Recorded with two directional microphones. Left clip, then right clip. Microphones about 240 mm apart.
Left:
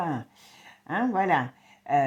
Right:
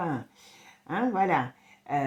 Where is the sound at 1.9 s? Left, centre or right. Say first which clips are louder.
Left 6 dB; left.